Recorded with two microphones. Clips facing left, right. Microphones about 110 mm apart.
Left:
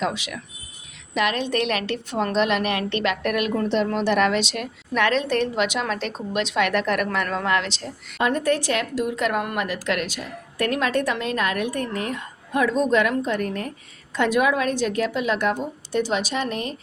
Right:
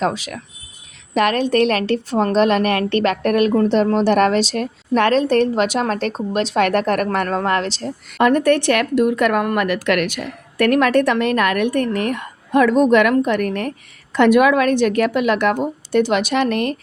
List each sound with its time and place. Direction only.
0.0 s a woman's voice: 40° right (ahead or behind)
8.2 s a woman's voice: 65° right (ahead or behind)